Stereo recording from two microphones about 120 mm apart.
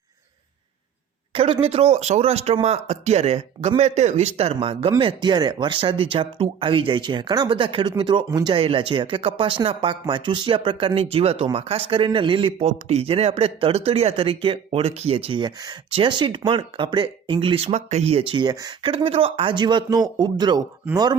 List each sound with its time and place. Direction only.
1.3 s a man's voice: 50° right (ahead or behind)
8.3 s speech: 30° right (ahead or behind)
8.5 s speech: 50° right (ahead or behind)